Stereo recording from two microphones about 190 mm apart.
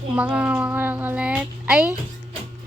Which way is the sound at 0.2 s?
5° right (ahead or behind).